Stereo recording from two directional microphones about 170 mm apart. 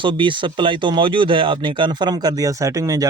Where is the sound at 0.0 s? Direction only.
30° right (ahead or behind).